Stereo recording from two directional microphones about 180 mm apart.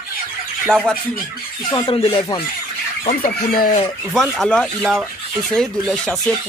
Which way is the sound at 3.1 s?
50° left (ahead or behind).